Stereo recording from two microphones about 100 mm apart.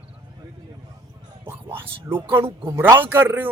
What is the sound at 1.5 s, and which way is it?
Speech, 20° right (ahead or behind).